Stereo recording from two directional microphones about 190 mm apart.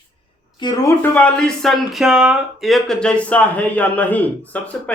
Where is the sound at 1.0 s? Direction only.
5° left (ahead or behind).